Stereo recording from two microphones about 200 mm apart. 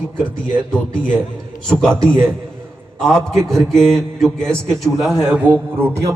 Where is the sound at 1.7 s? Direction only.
5° left (ahead or behind).